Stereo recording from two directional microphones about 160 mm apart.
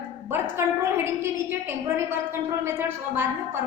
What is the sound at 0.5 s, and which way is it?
A woman's voice, 15° right (ahead or behind).